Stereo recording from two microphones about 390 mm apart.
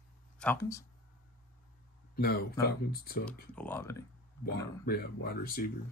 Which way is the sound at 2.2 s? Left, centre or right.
Left.